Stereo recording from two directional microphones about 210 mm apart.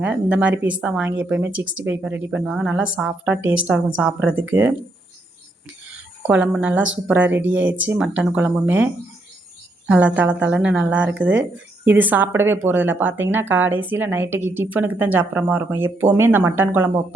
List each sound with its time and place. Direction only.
0.0 s speech: 5° right (ahead or behind)
1.5 s speech: 65° right (ahead or behind)
1.8 s speech: 10° right (ahead or behind)
6.2 s speech: 5° right (ahead or behind)